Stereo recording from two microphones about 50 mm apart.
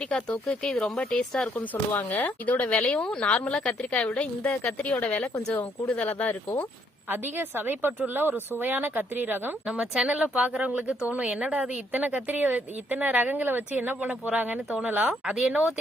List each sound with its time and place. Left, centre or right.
0.1 s speech: centre
2.0 s speech: left
4.8 s speech: left
7.1 s speech: right
9.9 s speech: centre
11.9 s speech: right
15.3 s speech: right